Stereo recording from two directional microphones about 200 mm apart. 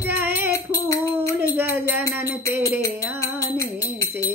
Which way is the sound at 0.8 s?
15° left (ahead or behind).